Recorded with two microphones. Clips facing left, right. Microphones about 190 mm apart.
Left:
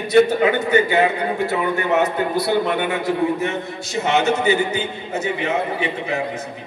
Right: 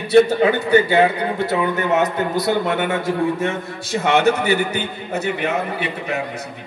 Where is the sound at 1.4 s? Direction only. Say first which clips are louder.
Right 2 dB; 40° right (ahead or behind).